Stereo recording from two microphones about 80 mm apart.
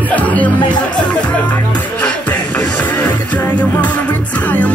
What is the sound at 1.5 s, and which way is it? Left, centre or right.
Music, centre.